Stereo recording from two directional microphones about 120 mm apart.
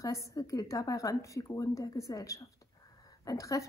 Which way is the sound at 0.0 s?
25° left (ahead or behind).